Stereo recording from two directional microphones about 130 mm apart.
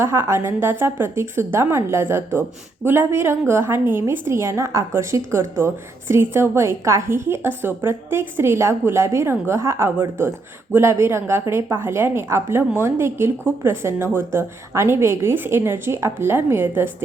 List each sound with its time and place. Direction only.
0.0 s a woman's voice: 20° right (ahead or behind)